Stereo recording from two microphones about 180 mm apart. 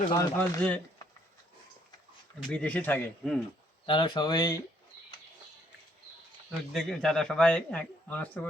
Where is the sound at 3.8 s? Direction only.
25° left (ahead or behind).